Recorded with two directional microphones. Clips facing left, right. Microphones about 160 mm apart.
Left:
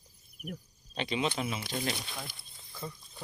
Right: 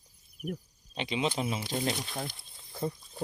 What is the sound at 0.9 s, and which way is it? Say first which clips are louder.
Speech: right 1 dB; 20° right (ahead or behind).